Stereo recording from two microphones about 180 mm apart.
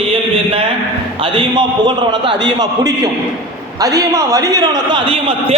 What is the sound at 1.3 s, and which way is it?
A man's voice, 25° right (ahead or behind).